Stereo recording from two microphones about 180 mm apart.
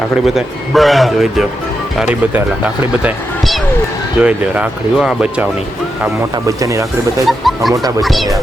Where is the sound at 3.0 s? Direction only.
Centre (ahead or behind).